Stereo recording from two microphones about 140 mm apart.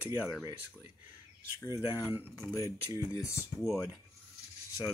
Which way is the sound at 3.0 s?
25° left (ahead or behind).